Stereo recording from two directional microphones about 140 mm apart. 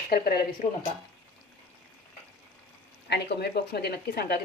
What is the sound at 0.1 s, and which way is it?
Speech, 90° left.